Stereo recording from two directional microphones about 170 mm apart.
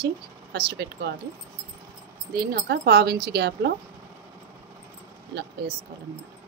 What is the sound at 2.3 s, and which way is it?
A woman's voice, 65° right (ahead or behind).